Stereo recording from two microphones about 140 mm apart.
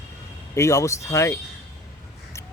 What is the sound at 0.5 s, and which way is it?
Speech, 20° left (ahead or behind).